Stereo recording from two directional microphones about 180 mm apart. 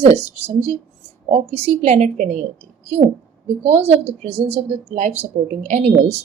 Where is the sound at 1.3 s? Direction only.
35° right (ahead or behind).